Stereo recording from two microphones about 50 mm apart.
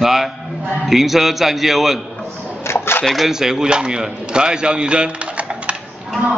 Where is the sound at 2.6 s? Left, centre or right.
Left.